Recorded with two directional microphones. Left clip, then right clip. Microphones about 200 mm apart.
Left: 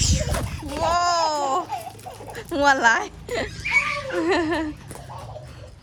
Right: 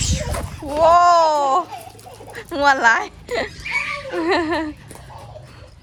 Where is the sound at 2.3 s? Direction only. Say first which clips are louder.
Right 3 dB; 15° left (ahead or behind).